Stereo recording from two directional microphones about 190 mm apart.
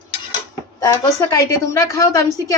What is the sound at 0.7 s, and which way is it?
A woman's voice, 20° left (ahead or behind).